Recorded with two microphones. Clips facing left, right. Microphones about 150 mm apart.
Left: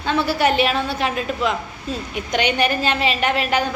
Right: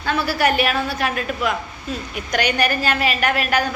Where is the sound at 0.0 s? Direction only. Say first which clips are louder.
Left 1 dB; 25° left (ahead or behind).